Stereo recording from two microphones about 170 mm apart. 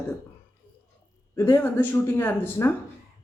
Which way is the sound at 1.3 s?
15° left (ahead or behind).